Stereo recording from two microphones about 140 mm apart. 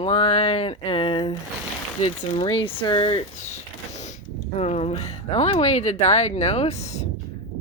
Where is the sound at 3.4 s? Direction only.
55° left (ahead or behind).